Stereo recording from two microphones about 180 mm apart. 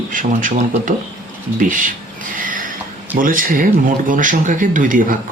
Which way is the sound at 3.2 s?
50° right (ahead or behind).